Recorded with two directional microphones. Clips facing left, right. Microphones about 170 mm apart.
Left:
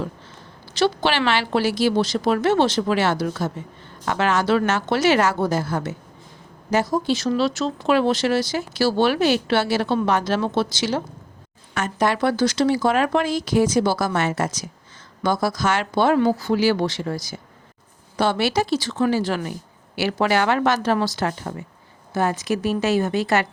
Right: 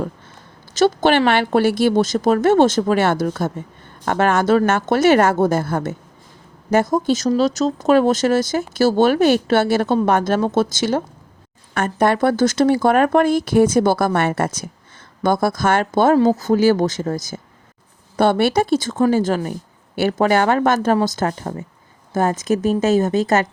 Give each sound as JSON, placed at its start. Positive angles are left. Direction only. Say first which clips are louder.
{"t": 0.7, "sound": "speech", "louder": "right 5 dB", "side_deg": -45}